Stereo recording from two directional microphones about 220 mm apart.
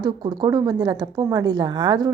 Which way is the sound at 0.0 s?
20° right (ahead or behind).